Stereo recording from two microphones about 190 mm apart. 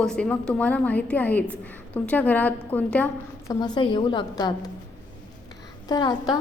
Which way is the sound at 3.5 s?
20° left (ahead or behind).